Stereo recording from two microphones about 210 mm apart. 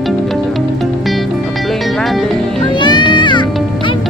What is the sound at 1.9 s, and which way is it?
Music, centre (ahead or behind).